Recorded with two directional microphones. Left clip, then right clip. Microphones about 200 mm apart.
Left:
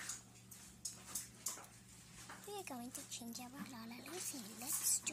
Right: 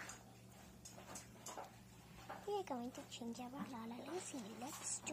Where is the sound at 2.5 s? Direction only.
35° left (ahead or behind).